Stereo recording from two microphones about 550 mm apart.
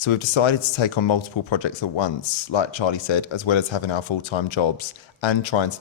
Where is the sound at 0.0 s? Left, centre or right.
Left.